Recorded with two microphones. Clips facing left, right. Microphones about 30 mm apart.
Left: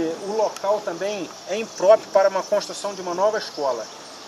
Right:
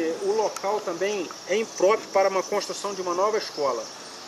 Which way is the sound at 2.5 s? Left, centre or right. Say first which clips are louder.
Left 4 dB; centre.